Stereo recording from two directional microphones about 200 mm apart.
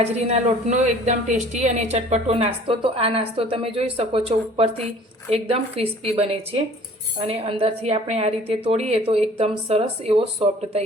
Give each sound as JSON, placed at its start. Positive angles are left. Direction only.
{"t": 0.0, "sound": "a woman's voice", "side_deg": -35}